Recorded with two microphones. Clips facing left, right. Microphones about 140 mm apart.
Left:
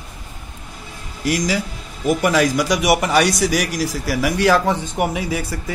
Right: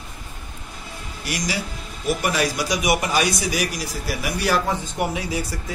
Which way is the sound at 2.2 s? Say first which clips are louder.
Left 7 dB; 90° left.